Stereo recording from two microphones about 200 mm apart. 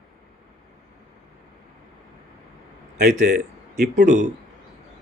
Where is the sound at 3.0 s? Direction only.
45° right (ahead or behind).